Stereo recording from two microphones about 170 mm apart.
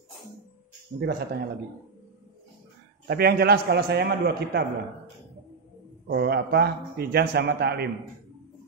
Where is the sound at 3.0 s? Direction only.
70° right (ahead or behind).